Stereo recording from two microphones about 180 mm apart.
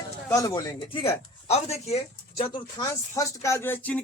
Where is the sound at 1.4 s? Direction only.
35° left (ahead or behind).